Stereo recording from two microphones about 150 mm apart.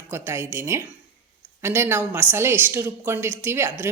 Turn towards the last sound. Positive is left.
turn(degrees=-15)  # may be behind; listen again after turning